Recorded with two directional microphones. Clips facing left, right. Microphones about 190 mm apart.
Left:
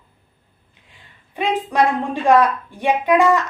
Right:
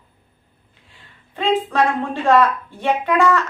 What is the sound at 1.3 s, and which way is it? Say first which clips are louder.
Speech: right 2 dB; 15° left (ahead or behind).